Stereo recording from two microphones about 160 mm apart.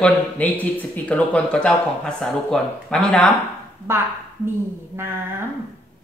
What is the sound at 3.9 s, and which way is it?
Speech, 15° right (ahead or behind).